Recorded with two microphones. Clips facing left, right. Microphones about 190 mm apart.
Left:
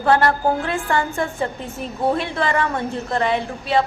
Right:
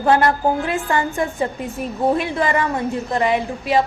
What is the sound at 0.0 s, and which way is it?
A woman's voice, 20° right (ahead or behind).